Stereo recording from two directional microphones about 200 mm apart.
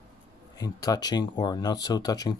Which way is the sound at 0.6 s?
20° left (ahead or behind).